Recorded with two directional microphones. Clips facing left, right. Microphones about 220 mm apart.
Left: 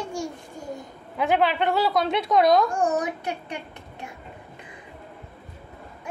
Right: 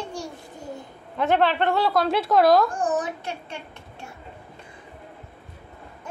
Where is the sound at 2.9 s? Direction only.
15° left (ahead or behind).